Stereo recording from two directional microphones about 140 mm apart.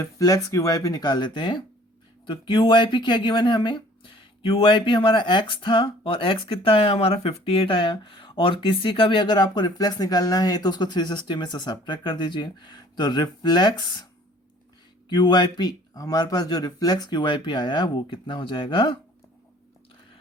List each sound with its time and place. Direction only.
0.0 s speech: 25° left (ahead or behind)
15.1 s speech: 30° left (ahead or behind)